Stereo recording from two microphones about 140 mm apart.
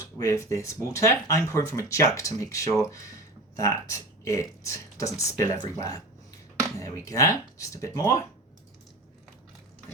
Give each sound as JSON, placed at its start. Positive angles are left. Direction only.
{"t": 0.2, "sound": "speech", "side_deg": 25}